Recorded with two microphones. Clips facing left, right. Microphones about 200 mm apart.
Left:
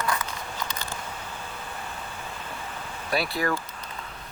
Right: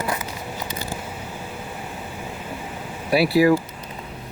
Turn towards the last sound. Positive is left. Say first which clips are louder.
# right 11 dB
turn(degrees=-5)  # may be behind; listen again after turning